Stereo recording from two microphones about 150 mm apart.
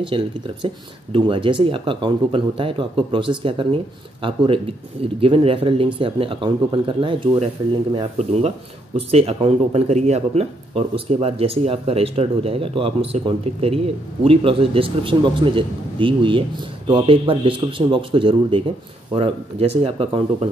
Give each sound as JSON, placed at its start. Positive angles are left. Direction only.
{"t": 0.0, "sound": "speech", "side_deg": -35}
{"t": 8.2, "sound": "speech", "side_deg": -45}